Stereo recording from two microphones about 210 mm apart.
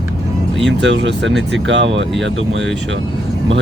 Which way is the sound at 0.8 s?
60° right (ahead or behind).